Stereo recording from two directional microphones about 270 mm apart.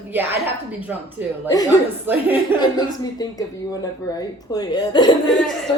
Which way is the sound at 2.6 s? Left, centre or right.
Centre.